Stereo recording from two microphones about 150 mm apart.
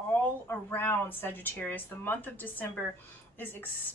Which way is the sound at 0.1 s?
10° left (ahead or behind).